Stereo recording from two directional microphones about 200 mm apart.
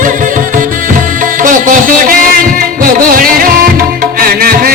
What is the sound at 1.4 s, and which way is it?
Music, 40° right (ahead or behind).